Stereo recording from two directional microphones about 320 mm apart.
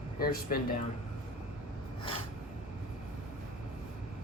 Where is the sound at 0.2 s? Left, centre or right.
Left.